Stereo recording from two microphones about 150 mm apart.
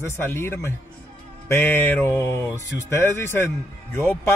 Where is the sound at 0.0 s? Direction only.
15° left (ahead or behind).